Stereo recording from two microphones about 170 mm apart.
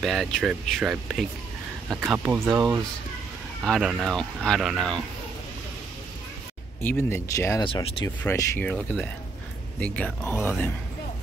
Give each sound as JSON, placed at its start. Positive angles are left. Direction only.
{"t": 0.0, "sound": "speech", "side_deg": 0}
{"t": 6.8, "sound": "speech", "side_deg": 15}
{"t": 7.6, "sound": "speech", "side_deg": 30}
{"t": 8.2, "sound": "speech", "side_deg": 10}
{"t": 9.8, "sound": "speech", "side_deg": 5}